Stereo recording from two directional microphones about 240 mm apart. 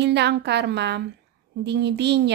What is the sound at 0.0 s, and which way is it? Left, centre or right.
A woman's voice, right.